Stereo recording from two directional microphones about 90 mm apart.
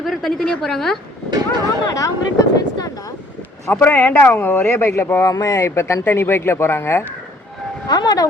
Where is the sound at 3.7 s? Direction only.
25° left (ahead or behind).